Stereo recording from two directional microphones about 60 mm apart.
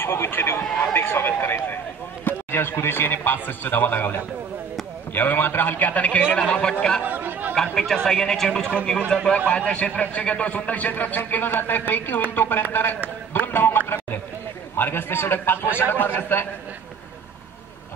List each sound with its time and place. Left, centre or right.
0.0 s speech: left
0.9 s a sound: left
2.2 s a man's voice: left; by 6.7 s centre
7.0 s chatter: right
7.5 s a man's voice: centre
9.5 s a man's voice: centre; by 16.4 s left